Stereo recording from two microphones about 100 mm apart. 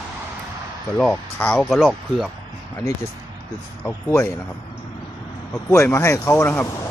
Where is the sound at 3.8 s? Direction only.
25° left (ahead or behind).